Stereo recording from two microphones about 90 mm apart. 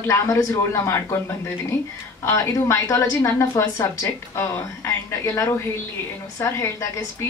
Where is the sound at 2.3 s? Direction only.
35° left (ahead or behind).